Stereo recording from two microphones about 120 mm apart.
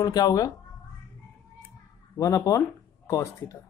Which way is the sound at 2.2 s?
25° left (ahead or behind).